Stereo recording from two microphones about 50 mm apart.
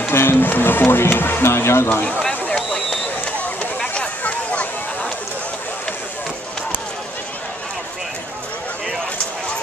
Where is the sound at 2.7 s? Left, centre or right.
Centre.